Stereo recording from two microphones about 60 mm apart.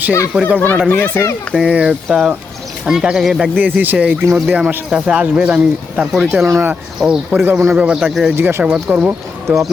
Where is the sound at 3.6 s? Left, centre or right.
Right.